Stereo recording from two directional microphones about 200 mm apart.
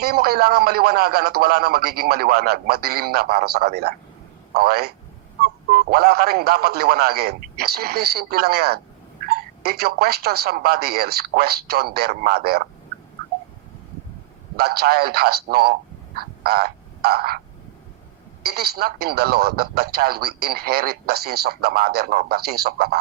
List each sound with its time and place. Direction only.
0.0 s speech: 50° right (ahead or behind)
14.5 s a man's voice: 50° right (ahead or behind)
18.4 s speech: 50° right (ahead or behind)